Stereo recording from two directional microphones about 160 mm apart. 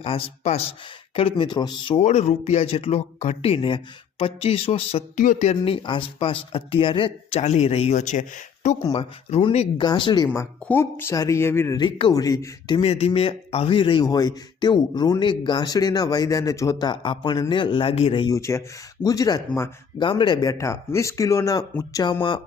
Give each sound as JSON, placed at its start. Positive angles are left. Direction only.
{"t": 0.0, "sound": "speech", "side_deg": 35}
{"t": 2.0, "sound": "speech", "side_deg": 40}
{"t": 5.1, "sound": "speech", "side_deg": 55}
{"t": 5.5, "sound": "speech", "side_deg": 35}
{"t": 8.8, "sound": "speech", "side_deg": 25}
{"t": 9.3, "sound": "speech", "side_deg": 40}
{"t": 10.3, "sound": "speech", "side_deg": 15}
{"t": 11.8, "sound": "speech", "side_deg": 30}
{"t": 18.3, "sound": "speech", "side_deg": 20}
{"t": 20.0, "sound": "speech", "side_deg": 30}